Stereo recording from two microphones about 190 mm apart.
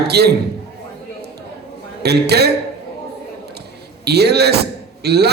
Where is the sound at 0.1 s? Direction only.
60° right (ahead or behind).